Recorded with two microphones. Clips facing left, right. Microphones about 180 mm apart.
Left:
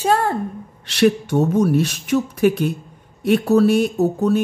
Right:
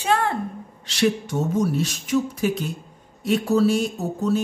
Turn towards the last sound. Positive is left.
turn(degrees=60)  # may be behind; listen again after turning